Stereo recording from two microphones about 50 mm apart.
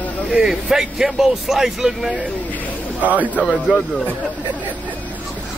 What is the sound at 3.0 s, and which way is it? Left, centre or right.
Speech, right.